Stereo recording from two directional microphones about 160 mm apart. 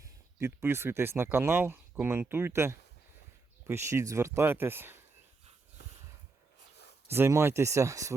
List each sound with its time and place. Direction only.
0.0 s speech: 15° right (ahead or behind)
7.1 s speech: 15° right (ahead or behind)